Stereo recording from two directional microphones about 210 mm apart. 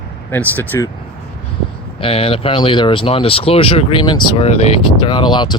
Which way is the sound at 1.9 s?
25° left (ahead or behind).